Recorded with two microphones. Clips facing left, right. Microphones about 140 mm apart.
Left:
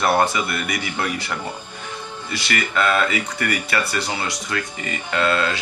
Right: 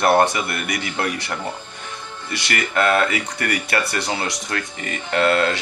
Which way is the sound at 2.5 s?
50° right (ahead or behind).